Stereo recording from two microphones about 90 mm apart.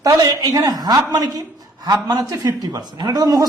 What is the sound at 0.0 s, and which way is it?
A woman's voice, 50° right (ahead or behind).